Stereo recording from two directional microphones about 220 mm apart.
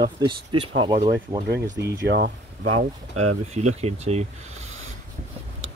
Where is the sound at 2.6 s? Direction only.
80° right.